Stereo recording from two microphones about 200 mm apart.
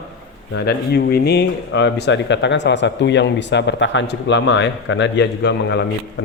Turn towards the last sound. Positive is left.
turn(degrees=60)  # may be behind; listen again after turning